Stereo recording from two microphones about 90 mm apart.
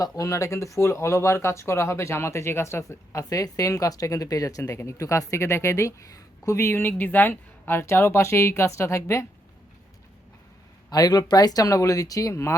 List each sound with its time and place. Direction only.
0.0 s speech: 35° left (ahead or behind)
6.7 s speech: 20° left (ahead or behind)
10.8 s speech: 45° left (ahead or behind)